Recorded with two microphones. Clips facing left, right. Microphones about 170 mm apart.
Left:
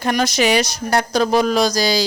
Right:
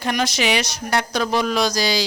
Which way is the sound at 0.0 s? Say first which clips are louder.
Left 4 dB; 40° left (ahead or behind).